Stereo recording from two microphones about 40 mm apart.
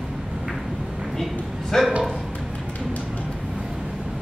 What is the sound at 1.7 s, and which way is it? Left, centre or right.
Speech, centre.